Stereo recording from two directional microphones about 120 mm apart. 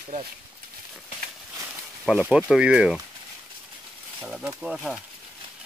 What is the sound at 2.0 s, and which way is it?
Speech, 10° right (ahead or behind).